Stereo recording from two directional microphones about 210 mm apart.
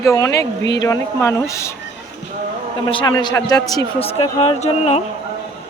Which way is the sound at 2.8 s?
20° left (ahead or behind).